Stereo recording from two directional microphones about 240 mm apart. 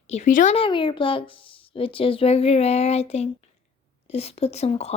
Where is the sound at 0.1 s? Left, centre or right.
Left.